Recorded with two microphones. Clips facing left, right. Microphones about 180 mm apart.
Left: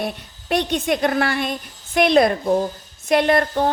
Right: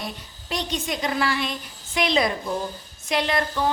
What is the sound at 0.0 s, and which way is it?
Speech, 60° left (ahead or behind).